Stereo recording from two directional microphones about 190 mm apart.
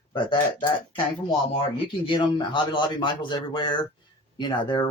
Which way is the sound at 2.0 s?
25° left (ahead or behind).